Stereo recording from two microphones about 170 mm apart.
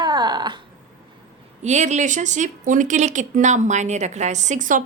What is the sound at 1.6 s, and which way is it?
Speech, 45° right (ahead or behind).